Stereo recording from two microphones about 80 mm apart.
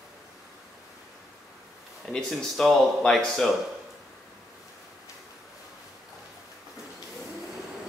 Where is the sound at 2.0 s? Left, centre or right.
Centre.